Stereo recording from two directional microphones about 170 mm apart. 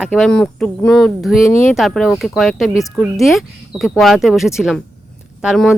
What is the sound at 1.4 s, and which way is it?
Speech, 15° left (ahead or behind).